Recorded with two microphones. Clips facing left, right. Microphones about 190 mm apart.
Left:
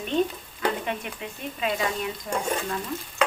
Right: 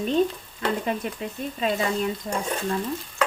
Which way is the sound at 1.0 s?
35° right (ahead or behind).